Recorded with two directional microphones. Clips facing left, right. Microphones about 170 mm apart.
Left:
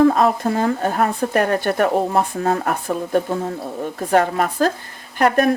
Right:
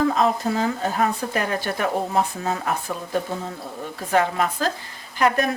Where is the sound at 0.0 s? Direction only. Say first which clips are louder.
Left 5 dB; 50° left (ahead or behind).